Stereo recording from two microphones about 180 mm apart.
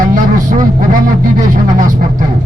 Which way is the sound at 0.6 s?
45° right (ahead or behind).